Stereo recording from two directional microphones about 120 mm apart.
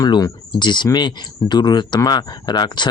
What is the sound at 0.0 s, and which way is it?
Speech, 35° left (ahead or behind).